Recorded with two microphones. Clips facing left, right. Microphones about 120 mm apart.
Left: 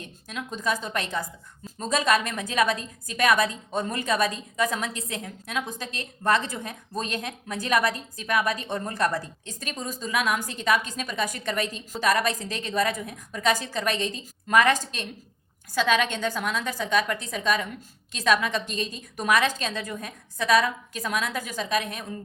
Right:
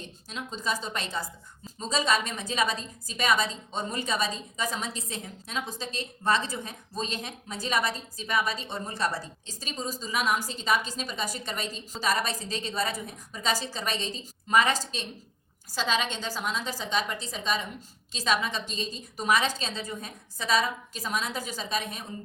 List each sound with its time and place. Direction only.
0.0 s a woman's voice: 55° left (ahead or behind)